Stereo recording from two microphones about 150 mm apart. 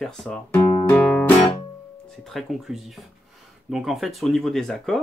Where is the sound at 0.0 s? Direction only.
5° left (ahead or behind).